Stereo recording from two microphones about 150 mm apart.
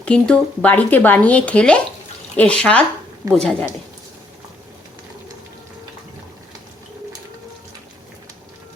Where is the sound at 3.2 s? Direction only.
25° right (ahead or behind).